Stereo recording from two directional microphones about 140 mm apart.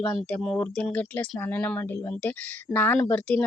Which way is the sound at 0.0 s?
10° left (ahead or behind).